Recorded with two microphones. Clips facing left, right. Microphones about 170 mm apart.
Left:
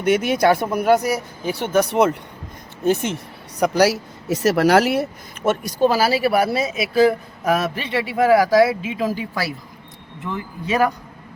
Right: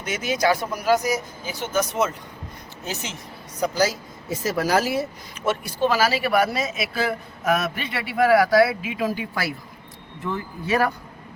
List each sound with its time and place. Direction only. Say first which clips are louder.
0.0 s speech: left 6 dB; 60° left (ahead or behind)
3.6 s speech: left 6 dB; 70° left (ahead or behind)
5.5 s speech: left 4 dB; 40° left (ahead or behind); by 9.4 s 25° left (ahead or behind)
10.7 s speech: left 3 dB; 20° left (ahead or behind)